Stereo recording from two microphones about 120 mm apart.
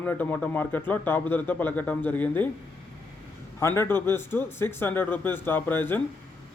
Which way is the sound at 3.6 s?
25° left (ahead or behind).